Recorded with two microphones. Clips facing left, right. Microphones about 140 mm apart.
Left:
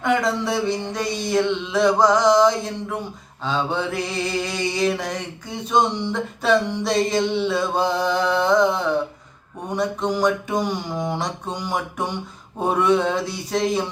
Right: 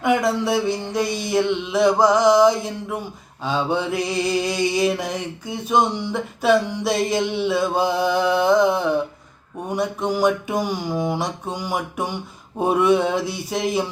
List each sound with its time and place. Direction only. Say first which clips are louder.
0.0 s mantra: right 2 dB; 10° right (ahead or behind)